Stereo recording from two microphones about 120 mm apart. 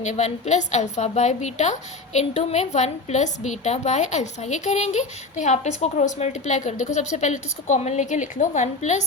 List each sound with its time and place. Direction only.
0.0 s a woman's voice: 70° left (ahead or behind)